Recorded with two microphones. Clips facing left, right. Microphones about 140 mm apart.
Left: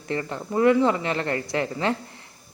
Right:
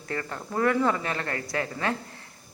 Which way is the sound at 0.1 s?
25° left (ahead or behind).